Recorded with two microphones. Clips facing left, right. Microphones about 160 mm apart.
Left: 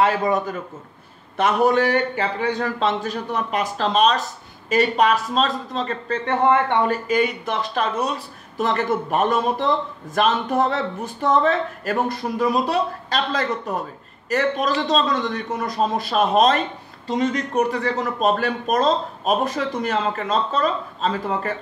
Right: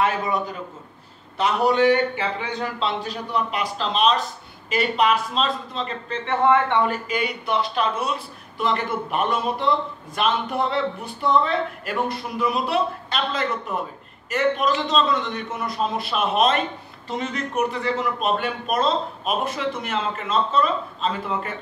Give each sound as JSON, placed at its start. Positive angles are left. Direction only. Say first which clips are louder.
{"t": 0.0, "sound": "a man's voice", "louder": "left 4 dB", "side_deg": 40}